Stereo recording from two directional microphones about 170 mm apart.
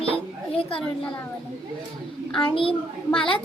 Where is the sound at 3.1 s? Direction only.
30° left (ahead or behind).